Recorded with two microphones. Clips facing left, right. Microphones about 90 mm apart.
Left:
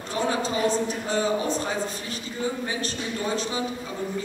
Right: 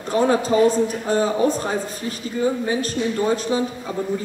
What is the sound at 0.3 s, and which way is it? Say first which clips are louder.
Speech: right 7 dB; 45° right (ahead or behind).